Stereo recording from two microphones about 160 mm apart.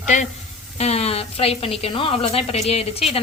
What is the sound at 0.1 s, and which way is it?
A woman's voice, 50° left (ahead or behind).